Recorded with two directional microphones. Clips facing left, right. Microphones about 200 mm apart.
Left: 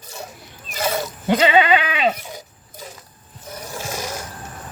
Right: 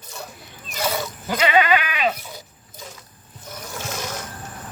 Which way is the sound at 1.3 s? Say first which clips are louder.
Left 3 dB; 30° left (ahead or behind).